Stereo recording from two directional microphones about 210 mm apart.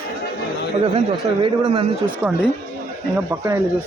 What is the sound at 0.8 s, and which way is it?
Speech, 25° right (ahead or behind).